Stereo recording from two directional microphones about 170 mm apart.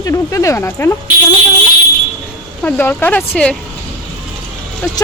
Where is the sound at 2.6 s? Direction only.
10° left (ahead or behind).